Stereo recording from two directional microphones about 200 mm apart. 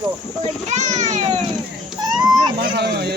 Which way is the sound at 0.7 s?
35° right (ahead or behind).